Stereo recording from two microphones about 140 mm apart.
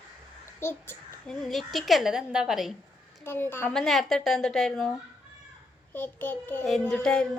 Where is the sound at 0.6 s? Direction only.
15° left (ahead or behind).